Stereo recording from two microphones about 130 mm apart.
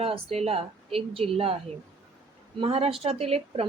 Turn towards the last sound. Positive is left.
turn(degrees=-50)  # may be behind; listen again after turning